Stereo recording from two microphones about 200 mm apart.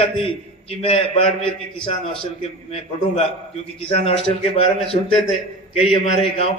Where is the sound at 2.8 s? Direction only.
30° left (ahead or behind).